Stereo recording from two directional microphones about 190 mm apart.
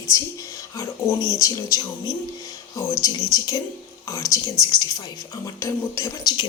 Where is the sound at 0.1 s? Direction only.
15° left (ahead or behind).